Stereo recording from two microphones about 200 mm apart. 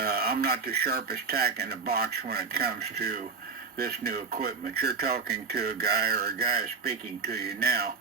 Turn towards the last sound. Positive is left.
turn(degrees=-50)  # may be behind; listen again after turning